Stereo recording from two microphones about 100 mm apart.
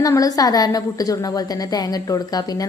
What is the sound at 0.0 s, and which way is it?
A woman's voice, 35° left (ahead or behind).